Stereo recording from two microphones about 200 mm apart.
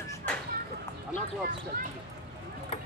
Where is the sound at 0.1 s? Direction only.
10° left (ahead or behind).